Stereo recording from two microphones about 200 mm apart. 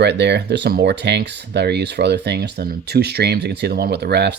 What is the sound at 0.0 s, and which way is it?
Speech, 60° right (ahead or behind).